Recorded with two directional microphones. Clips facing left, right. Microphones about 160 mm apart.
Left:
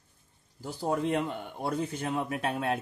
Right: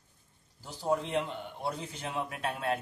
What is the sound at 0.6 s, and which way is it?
A man's voice, 50° left (ahead or behind).